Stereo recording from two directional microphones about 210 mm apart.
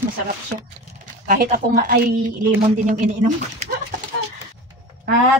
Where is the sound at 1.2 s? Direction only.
45° right (ahead or behind).